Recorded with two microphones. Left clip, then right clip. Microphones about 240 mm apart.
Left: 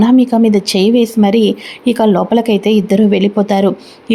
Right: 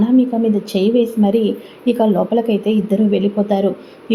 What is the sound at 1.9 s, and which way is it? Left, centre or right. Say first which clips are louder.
Speech: left 4 dB; left.